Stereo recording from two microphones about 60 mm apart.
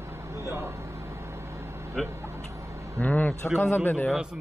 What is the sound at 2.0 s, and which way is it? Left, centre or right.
Speech, centre.